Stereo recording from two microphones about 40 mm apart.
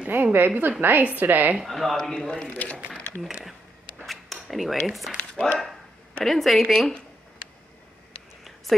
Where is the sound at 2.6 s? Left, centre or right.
Left.